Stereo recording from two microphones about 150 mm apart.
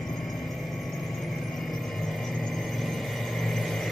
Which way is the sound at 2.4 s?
Centre (ahead or behind).